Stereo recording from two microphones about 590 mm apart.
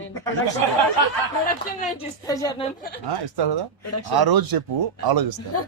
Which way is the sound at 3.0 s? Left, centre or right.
Right.